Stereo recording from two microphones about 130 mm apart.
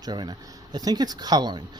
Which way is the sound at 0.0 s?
30° right (ahead or behind).